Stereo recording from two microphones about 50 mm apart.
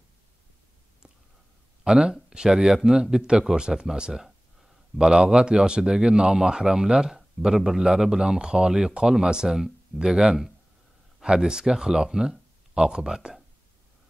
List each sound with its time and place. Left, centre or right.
1.9 s speech: centre